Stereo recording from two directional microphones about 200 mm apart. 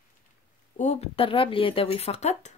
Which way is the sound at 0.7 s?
35° left (ahead or behind).